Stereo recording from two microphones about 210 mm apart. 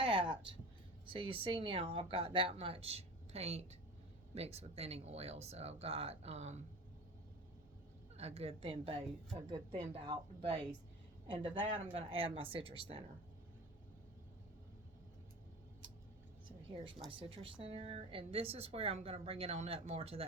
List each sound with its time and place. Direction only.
0.0 s a sound: 25° right (ahead or behind)
1.0 s speech: 25° right (ahead or behind)
8.1 s speech: 30° right (ahead or behind)
17.1 s speech: 25° right (ahead or behind)